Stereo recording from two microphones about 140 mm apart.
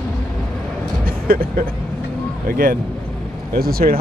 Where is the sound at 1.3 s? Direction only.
90° right.